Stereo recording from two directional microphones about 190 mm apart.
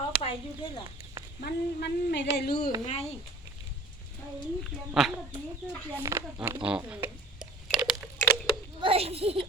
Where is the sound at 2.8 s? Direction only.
35° left (ahead or behind).